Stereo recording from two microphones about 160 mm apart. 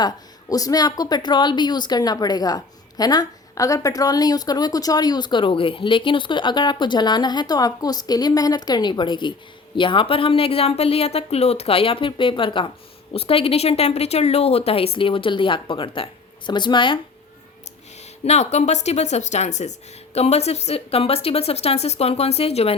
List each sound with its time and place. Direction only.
0.0 s a woman's voice: 20° left (ahead or behind)
18.3 s speech: 45° left (ahead or behind)